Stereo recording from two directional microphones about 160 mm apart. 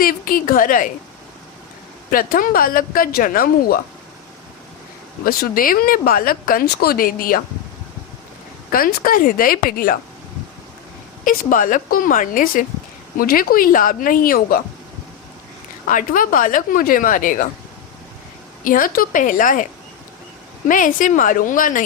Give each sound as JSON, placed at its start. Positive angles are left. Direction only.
{"t": 0.0, "sound": "a woman's voice", "side_deg": 60}
{"t": 2.0, "sound": "speech", "side_deg": 60}
{"t": 5.2, "sound": "speech", "side_deg": 65}
{"t": 8.7, "sound": "speech", "side_deg": 60}
{"t": 11.3, "sound": "speech", "side_deg": 60}
{"t": 15.9, "sound": "speech", "side_deg": 60}
{"t": 18.6, "sound": "speech", "side_deg": 60}
{"t": 20.7, "sound": "speech", "side_deg": 55}